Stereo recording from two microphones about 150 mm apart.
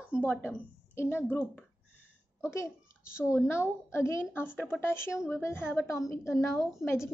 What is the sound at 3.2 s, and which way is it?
A woman's voice, 15° left (ahead or behind).